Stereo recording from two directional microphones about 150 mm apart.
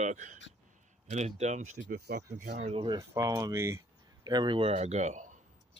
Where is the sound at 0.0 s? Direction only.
55° right (ahead or behind).